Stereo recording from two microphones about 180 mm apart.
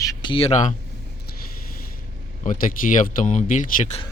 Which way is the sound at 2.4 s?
45° left (ahead or behind).